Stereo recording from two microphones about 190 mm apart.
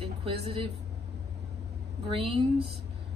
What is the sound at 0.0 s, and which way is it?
Speech, 30° right (ahead or behind).